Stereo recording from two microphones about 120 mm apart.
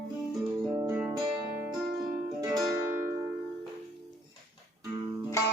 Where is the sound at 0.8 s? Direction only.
20° right (ahead or behind).